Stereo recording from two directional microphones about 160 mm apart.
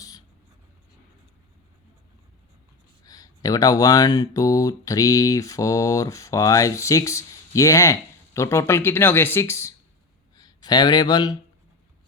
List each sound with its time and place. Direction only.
3.1 s speech: 25° left (ahead or behind)